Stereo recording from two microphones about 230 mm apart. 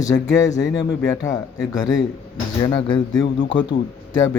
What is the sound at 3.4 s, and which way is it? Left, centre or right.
Speech, left.